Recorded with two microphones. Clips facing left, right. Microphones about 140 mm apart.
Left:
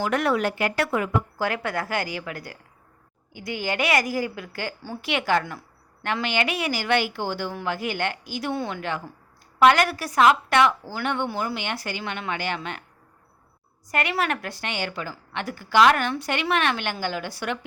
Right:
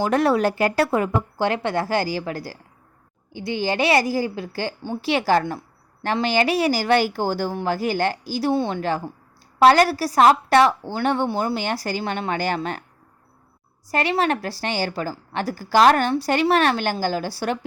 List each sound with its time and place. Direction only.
0.0 s a woman's voice: 35° right (ahead or behind)
13.8 s a woman's voice: 30° right (ahead or behind)